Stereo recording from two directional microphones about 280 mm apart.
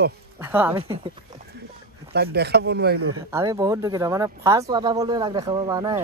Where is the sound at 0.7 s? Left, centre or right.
Centre.